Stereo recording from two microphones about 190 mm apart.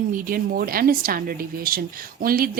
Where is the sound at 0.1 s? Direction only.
50° right (ahead or behind).